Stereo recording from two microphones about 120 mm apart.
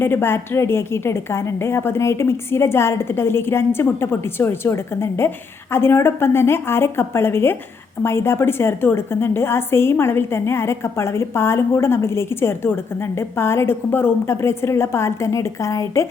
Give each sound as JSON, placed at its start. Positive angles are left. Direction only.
{"t": 0.0, "sound": "a woman's voice", "side_deg": 20}